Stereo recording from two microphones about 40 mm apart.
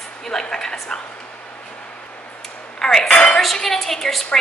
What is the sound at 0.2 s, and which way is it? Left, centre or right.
Speech, centre.